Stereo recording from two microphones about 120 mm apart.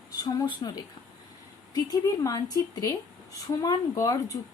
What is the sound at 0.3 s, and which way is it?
Speech, 30° left (ahead or behind).